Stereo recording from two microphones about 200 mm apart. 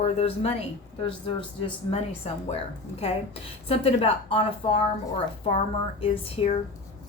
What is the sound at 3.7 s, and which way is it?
Speech, 30° left (ahead or behind).